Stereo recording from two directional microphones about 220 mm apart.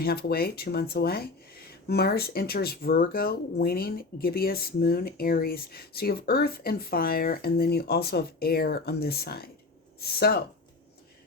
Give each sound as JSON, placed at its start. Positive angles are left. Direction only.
{"t": 0.0, "sound": "speech", "side_deg": 45}